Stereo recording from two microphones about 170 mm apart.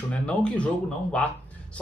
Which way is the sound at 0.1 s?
5° left (ahead or behind).